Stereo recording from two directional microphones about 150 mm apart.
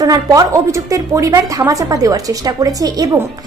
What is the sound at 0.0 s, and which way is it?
A woman's voice, 25° right (ahead or behind).